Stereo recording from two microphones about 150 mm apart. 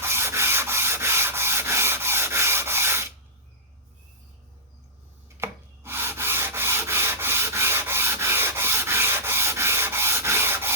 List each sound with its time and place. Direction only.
0.0 s rub: 15° right (ahead or behind)
5.4 s sanding: 15° right (ahead or behind)